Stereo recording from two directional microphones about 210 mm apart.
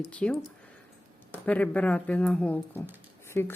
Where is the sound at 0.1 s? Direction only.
5° left (ahead or behind).